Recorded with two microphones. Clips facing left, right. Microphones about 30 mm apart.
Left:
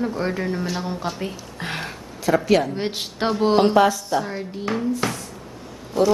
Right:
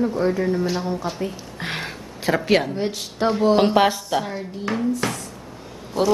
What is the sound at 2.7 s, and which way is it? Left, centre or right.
Speech, left.